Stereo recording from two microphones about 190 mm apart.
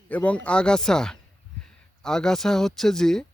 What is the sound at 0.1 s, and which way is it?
Speech, 5° left (ahead or behind).